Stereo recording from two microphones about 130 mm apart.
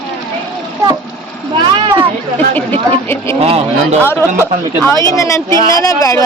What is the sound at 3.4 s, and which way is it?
Speech, 50° right (ahead or behind).